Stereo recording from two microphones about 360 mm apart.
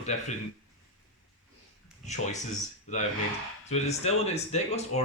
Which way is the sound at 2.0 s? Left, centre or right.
Centre.